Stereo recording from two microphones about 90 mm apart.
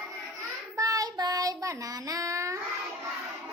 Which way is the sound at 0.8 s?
40° right (ahead or behind).